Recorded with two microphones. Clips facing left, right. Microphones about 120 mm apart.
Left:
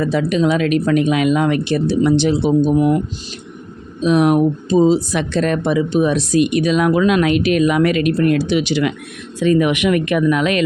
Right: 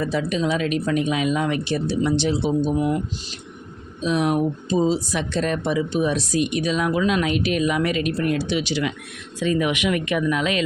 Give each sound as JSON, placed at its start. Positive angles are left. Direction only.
{"t": 0.0, "sound": "speech", "side_deg": 70}
{"t": 4.0, "sound": "speech", "side_deg": 65}